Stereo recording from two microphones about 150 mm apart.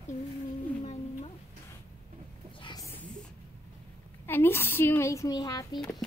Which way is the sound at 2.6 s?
30° left (ahead or behind).